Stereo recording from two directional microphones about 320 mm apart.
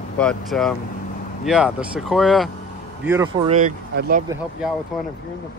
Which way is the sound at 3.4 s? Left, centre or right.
Right.